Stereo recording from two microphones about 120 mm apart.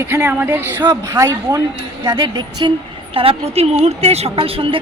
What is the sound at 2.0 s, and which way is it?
Speech, 35° right (ahead or behind).